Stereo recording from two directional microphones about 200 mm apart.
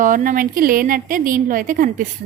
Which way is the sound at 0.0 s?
40° right (ahead or behind).